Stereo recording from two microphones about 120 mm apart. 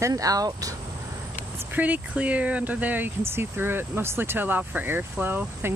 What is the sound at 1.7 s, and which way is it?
Speech, 15° right (ahead or behind).